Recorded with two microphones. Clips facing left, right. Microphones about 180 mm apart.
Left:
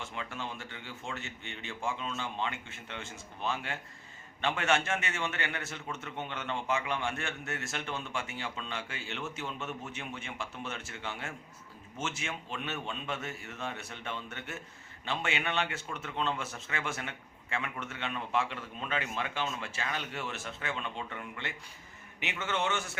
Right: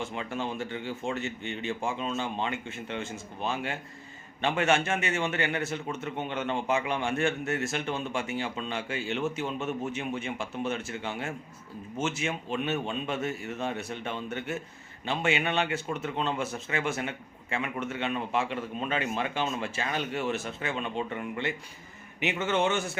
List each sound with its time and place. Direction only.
0.0 s a man's voice: 20° right (ahead or behind)